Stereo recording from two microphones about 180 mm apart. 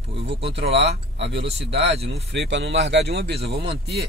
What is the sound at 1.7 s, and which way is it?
Speech, 35° right (ahead or behind).